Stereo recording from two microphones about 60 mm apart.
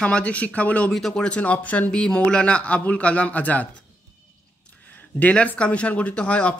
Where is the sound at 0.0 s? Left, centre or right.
Centre.